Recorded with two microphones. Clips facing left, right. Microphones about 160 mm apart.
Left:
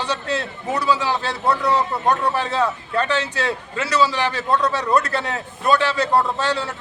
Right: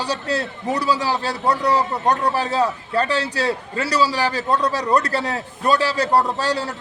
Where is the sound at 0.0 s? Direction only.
35° right (ahead or behind).